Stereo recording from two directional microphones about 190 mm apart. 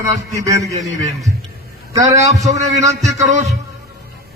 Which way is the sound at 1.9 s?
20° right (ahead or behind).